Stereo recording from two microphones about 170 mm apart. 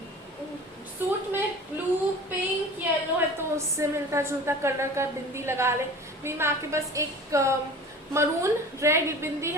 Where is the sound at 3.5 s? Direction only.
15° right (ahead or behind).